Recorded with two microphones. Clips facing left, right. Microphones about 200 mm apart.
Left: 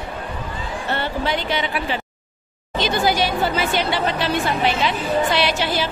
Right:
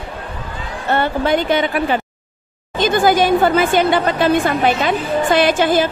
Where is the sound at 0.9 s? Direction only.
50° right (ahead or behind).